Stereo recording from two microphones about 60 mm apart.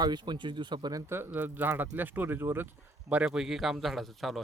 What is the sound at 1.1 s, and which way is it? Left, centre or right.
Speech, right.